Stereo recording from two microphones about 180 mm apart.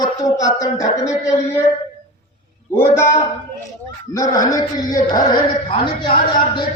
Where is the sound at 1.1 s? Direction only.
15° left (ahead or behind).